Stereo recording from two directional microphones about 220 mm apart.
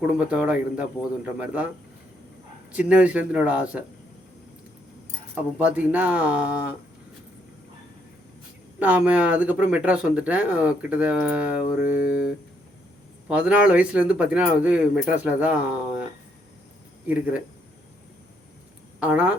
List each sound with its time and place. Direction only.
0.3 s speech: 5° right (ahead or behind)
2.7 s speech: 5° right (ahead or behind)
5.3 s speech: 5° right (ahead or behind)
8.8 s speech: 5° right (ahead or behind)
11.8 s mantra: 40° left (ahead or behind)
13.2 s speech: 5° right (ahead or behind)
17.1 s speech: 5° right (ahead or behind)
18.9 s speech: 5° right (ahead or behind)